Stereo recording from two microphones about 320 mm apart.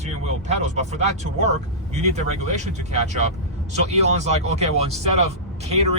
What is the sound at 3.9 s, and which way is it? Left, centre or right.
Speech, right.